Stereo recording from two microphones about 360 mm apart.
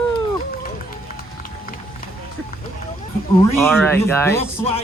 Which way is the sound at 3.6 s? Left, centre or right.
Centre.